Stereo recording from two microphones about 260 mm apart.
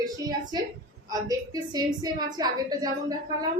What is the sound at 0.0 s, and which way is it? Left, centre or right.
A woman's voice, centre.